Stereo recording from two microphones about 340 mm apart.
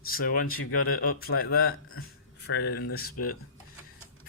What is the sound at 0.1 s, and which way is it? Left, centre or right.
Speech, left.